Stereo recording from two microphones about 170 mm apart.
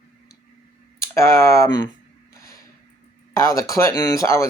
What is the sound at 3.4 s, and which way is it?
Speech, 20° left (ahead or behind).